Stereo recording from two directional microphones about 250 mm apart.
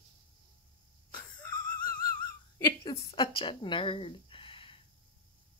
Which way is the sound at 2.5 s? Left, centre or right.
Centre.